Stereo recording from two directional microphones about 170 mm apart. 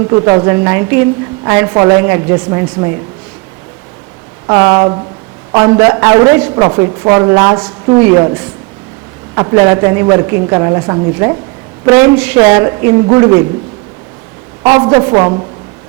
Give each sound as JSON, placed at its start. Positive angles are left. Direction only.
{"t": 0.1, "sound": "a woman's voice", "side_deg": -25}
{"t": 4.4, "sound": "a woman's voice", "side_deg": -25}
{"t": 9.3, "sound": "a woman's voice", "side_deg": -20}
{"t": 14.6, "sound": "a woman's voice", "side_deg": -25}